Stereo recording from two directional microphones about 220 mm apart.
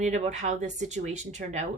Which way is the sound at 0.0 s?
30° right (ahead or behind).